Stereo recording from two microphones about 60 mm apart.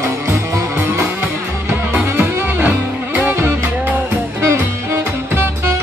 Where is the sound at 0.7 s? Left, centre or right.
Right.